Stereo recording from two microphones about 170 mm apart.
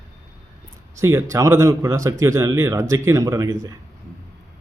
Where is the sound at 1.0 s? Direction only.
15° right (ahead or behind).